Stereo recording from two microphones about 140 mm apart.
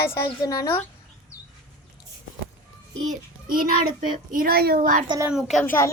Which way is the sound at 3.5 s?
90° right.